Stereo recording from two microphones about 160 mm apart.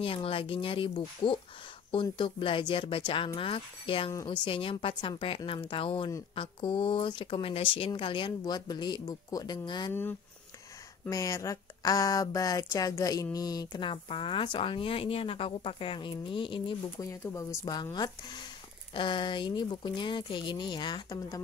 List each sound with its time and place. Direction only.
0.0 s a woman's voice: 35° left (ahead or behind)
4.1 s speech: 20° left (ahead or behind)
4.5 s a woman's voice: 35° left (ahead or behind)
11.1 s speech: 20° left (ahead or behind)
17.1 s speech: 20° left (ahead or behind)